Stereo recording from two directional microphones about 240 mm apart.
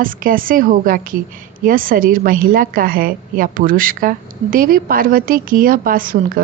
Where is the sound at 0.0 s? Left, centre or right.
Right.